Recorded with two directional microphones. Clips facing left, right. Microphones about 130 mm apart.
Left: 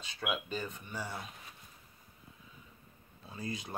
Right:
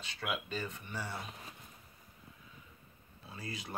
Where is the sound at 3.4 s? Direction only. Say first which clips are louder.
Left 4 dB; 15° left (ahead or behind).